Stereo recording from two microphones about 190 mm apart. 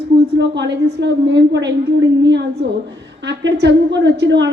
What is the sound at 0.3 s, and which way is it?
A woman's voice, 70° right (ahead or behind).